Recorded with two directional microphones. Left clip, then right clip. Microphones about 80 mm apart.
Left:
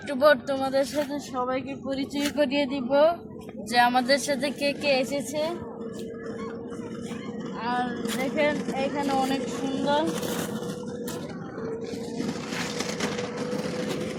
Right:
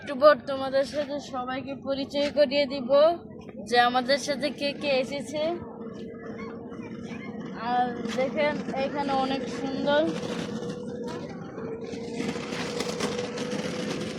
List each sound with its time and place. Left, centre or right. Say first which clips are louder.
0.1 s a woman's voice: right 1 dB; centre
1.5 s speech: even; right
2.3 s speech: right 2 dB; right
3.7 s a woman's voice: left 1 dB; centre
8.2 s a woman's voice: even; centre
10.1 s speech: left 2 dB; left
12.7 s vehicle: right 2 dB; left